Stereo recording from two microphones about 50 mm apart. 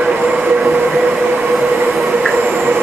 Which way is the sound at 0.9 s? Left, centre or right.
Centre.